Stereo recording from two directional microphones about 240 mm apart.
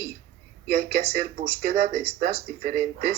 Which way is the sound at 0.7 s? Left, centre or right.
Right.